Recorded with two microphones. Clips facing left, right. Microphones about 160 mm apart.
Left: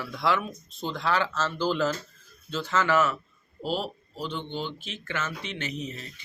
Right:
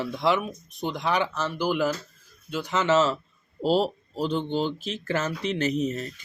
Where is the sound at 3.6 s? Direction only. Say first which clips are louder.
Right 8 dB; 40° right (ahead or behind).